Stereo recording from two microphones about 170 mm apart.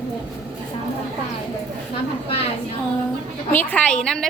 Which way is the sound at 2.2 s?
35° left (ahead or behind).